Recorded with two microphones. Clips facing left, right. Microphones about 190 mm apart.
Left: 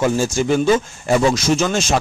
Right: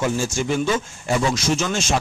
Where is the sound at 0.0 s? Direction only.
40° left (ahead or behind).